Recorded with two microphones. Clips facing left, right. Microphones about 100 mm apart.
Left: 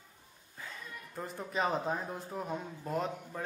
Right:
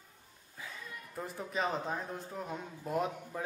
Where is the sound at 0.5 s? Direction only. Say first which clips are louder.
Even; 5° right (ahead or behind).